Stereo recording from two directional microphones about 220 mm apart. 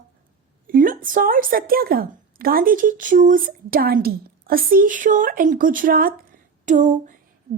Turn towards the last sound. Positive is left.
turn(degrees=-35)  # may be behind; listen again after turning